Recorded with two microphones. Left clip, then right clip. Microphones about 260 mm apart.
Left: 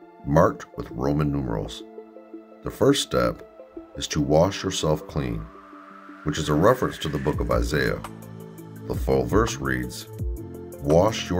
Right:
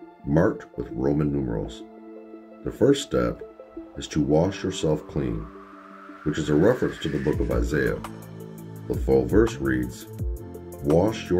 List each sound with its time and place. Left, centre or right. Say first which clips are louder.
0.3 s speech: left 3 dB; left
6.3 s speech: left 1 dB; left
10.1 s music: left 1 dB; centre
11.0 s speech: left 4 dB; left